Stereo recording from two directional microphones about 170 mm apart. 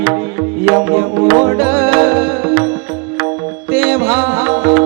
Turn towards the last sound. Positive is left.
turn(degrees=-10)  # may be behind; listen again after turning